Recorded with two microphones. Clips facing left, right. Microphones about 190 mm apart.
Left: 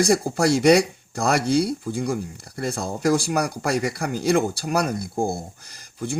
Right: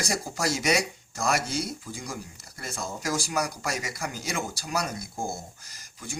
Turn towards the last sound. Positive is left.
turn(degrees=60)  # may be behind; listen again after turning